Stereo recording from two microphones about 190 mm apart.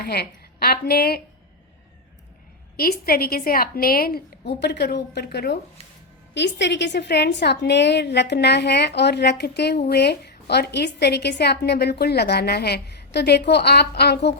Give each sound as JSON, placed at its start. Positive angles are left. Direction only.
{"t": 0.0, "sound": "speech", "side_deg": 55}
{"t": 2.7, "sound": "a woman's voice", "side_deg": 50}